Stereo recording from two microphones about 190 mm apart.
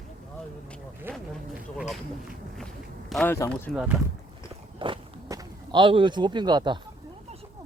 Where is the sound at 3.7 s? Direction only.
5° right (ahead or behind).